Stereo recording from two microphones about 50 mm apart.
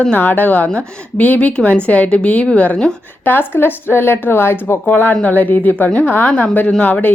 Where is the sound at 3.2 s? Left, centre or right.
Left.